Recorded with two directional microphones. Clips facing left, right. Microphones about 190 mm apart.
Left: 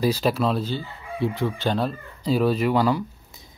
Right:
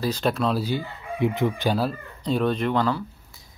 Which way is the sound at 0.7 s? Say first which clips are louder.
Right 2 dB; 15° right (ahead or behind).